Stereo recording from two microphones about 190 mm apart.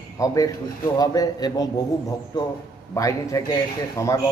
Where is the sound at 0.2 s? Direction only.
20° left (ahead or behind).